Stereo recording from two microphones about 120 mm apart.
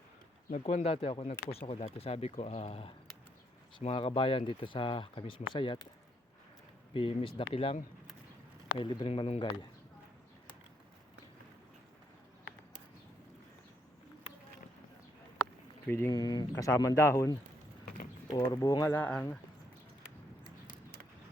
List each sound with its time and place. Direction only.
0.5 s speech: 75° left (ahead or behind); by 5.9 s 40° left (ahead or behind)
6.9 s speech: 50° left (ahead or behind)
8.8 s speech: 45° left (ahead or behind)
15.9 s speech: 20° left (ahead or behind)
16.1 s speech: 35° left (ahead or behind); by 19.2 s 15° left (ahead or behind)